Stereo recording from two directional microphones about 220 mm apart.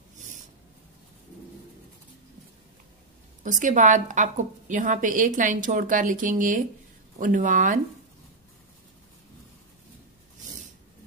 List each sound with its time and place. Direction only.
3.4 s a woman's voice: 35° right (ahead or behind)